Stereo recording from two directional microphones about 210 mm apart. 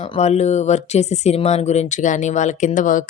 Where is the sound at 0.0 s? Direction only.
30° left (ahead or behind).